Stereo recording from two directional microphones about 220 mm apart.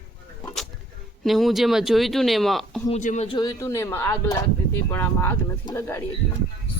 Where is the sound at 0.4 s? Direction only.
Centre (ahead or behind).